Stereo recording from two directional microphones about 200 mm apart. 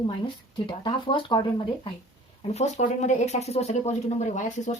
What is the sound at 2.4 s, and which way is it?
Speech, 35° left (ahead or behind).